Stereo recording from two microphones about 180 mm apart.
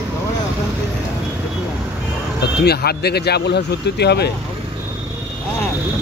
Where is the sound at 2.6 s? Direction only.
65° left (ahead or behind).